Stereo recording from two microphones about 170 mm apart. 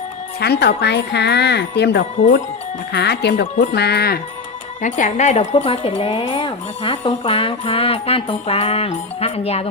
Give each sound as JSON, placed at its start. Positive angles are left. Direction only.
{"t": 0.3, "sound": "speech", "side_deg": 75}
{"t": 3.5, "sound": "speech", "side_deg": 45}
{"t": 3.8, "sound": "speech", "side_deg": 70}
{"t": 4.8, "sound": "speech", "side_deg": 50}